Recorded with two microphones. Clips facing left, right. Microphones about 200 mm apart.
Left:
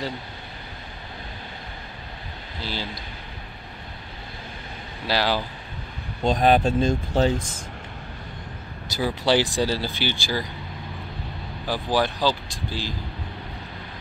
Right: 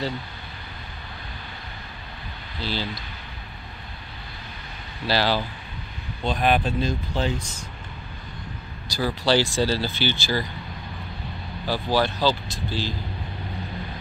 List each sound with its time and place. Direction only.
2.7 s speech: 15° left (ahead or behind)
5.0 s speech: 10° left (ahead or behind)
6.2 s speech: 40° left (ahead or behind)
8.8 s speech: 20° left (ahead or behind)
11.6 s speech: 15° left (ahead or behind)